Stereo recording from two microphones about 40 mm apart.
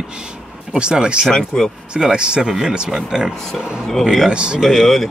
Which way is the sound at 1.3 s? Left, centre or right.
Centre.